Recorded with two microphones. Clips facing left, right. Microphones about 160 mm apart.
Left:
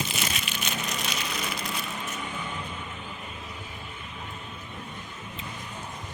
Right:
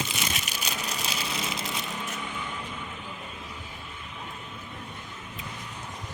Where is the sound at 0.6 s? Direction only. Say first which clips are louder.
Left 2 dB; 30° right (ahead or behind).